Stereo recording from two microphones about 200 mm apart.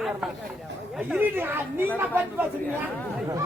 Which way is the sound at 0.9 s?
10° right (ahead or behind).